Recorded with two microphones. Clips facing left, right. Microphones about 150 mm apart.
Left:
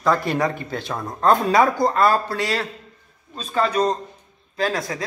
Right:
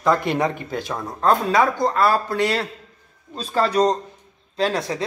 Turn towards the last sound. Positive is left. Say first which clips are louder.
# right 2 dB
turn(degrees=-30)  # may be behind; listen again after turning